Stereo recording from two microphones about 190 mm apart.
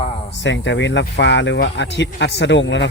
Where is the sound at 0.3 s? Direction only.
70° left (ahead or behind).